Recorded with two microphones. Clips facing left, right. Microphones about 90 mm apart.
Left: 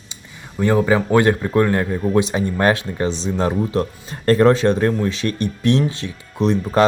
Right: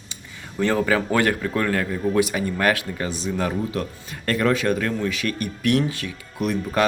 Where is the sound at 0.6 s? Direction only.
15° left (ahead or behind).